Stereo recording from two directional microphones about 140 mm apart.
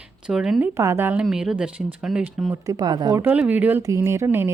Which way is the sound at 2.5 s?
25° right (ahead or behind).